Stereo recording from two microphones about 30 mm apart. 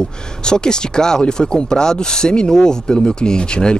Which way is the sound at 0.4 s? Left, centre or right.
Left.